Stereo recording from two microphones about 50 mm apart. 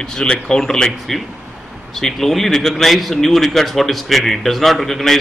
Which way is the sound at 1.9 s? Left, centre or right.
Centre.